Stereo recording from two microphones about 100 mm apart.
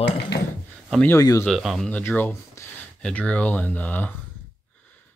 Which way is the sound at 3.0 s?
10° left (ahead or behind).